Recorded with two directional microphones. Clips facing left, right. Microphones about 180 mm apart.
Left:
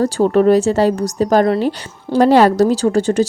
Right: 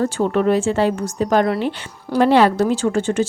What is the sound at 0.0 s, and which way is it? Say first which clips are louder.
A woman's voice: left 5 dB; 35° left (ahead or behind).